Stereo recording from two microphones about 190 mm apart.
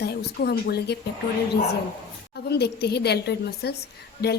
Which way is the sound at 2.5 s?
60° left (ahead or behind).